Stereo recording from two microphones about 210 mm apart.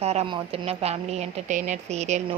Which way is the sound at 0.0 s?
30° right (ahead or behind).